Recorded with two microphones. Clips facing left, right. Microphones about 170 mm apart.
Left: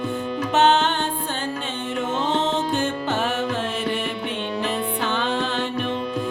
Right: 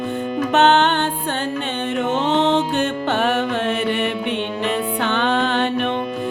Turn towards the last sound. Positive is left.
turn(degrees=-65)  # may be behind; listen again after turning